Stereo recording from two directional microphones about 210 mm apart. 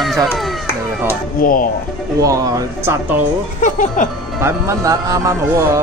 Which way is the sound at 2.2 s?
15° right (ahead or behind).